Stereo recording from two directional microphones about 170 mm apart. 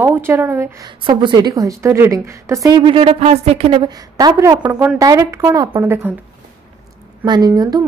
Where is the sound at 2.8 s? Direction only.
30° right (ahead or behind); by 6.1 s 15° right (ahead or behind).